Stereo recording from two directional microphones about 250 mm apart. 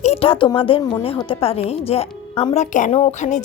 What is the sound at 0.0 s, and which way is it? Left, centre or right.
A woman's voice, left.